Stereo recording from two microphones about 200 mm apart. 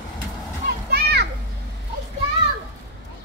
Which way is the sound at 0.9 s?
55° right (ahead or behind).